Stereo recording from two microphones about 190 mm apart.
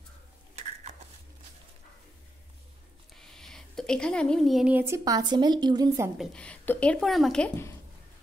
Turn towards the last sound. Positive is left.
turn(degrees=5)  # may be behind; listen again after turning